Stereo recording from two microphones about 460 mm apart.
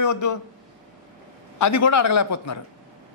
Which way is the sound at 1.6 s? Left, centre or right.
Left.